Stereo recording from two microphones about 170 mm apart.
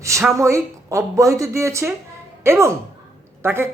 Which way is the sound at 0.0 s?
15° right (ahead or behind).